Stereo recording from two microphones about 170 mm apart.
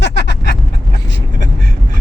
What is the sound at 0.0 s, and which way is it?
Vehicle, 90° left.